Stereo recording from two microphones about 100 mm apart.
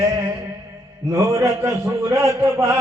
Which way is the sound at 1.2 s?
25° right (ahead or behind).